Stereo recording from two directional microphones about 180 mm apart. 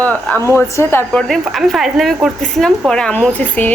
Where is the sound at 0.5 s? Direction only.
10° left (ahead or behind).